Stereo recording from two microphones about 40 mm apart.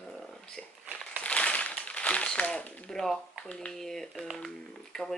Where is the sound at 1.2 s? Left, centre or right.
Left.